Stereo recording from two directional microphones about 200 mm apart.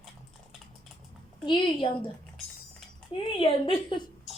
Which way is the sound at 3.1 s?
25° left (ahead or behind).